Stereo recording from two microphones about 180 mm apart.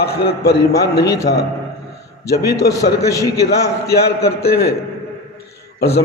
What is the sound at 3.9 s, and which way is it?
Speech, 60° left (ahead or behind).